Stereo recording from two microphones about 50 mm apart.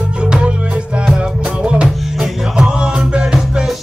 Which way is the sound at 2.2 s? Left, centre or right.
Centre.